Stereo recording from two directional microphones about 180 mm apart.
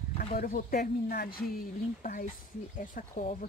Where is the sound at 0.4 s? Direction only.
50° left (ahead or behind).